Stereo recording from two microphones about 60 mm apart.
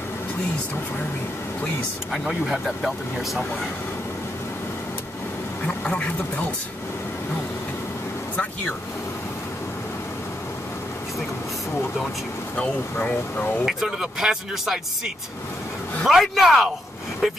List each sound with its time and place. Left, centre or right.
2.1 s speech: centre
5.9 s speech: left
13.0 s speech: left
13.7 s speech: centre
16.1 s speech: centre